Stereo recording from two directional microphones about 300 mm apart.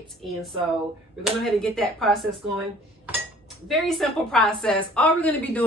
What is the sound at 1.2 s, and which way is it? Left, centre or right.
A woman's voice, centre.